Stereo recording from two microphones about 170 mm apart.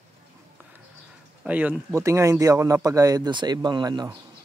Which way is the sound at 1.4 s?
10° right (ahead or behind).